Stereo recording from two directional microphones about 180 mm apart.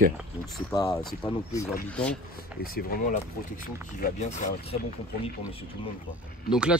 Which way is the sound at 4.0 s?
45° left (ahead or behind).